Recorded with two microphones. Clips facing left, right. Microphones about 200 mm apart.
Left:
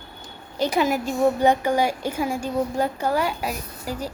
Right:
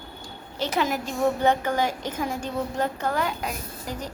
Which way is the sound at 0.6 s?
10° left (ahead or behind).